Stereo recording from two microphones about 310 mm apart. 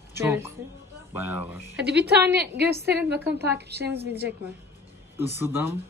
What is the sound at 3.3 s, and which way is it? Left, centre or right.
Speech, right.